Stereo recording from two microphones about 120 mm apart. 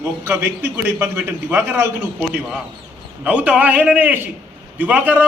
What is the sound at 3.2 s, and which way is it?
A man's voice, 10° right (ahead or behind).